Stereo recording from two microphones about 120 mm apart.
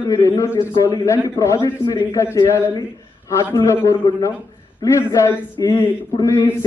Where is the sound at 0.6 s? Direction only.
35° left (ahead or behind).